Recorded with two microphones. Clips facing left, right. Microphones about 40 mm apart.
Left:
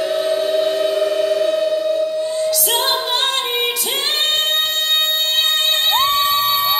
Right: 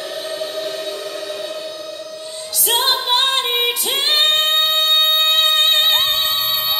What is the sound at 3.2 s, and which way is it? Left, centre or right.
Female singing, centre.